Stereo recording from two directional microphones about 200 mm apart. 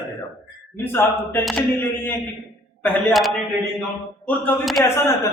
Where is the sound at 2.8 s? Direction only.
Centre (ahead or behind).